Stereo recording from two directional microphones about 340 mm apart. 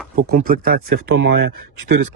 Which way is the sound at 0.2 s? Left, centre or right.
Right.